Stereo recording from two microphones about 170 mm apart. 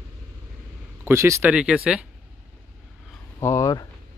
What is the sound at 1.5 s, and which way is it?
Speech, 5° right (ahead or behind).